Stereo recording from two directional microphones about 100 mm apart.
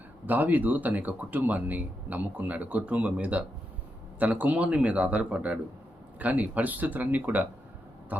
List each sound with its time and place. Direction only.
0.3 s speech: 15° right (ahead or behind)